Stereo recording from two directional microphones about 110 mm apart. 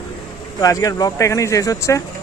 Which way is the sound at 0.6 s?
35° left (ahead or behind).